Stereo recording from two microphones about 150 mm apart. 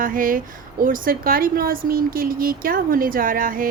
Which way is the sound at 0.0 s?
65° right (ahead or behind).